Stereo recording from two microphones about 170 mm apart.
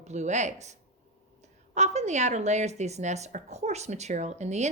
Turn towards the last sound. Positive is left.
turn(degrees=-40)  # may be behind; listen again after turning